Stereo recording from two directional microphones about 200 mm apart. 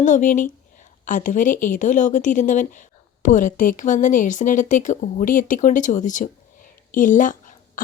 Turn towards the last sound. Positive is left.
turn(degrees=40)  # may be behind; listen again after turning